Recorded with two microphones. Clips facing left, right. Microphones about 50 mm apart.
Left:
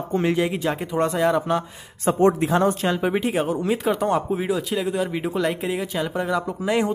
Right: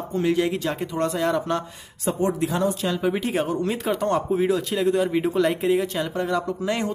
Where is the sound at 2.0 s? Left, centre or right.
Left.